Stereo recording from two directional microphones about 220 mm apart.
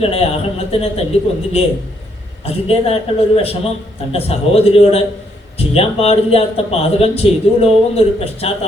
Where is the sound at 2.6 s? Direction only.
25° left (ahead or behind).